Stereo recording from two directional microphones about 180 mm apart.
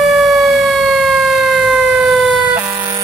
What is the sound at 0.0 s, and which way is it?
Emergency vehicle, centre (ahead or behind).